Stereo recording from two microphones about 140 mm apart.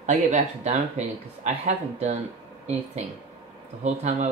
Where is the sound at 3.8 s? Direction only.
55° right (ahead or behind).